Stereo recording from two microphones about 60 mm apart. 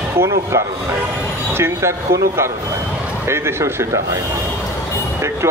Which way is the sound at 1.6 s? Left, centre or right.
Right.